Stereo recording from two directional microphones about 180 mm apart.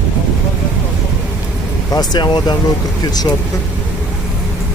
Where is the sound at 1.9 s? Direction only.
25° left (ahead or behind).